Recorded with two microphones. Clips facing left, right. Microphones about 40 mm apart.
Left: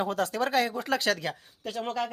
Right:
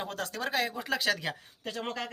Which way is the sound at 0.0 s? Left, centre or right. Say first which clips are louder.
Left 7 dB; centre.